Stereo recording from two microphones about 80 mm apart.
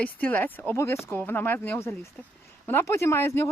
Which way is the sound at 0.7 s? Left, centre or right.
Left.